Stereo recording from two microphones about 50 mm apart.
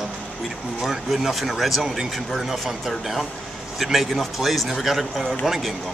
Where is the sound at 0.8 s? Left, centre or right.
Centre.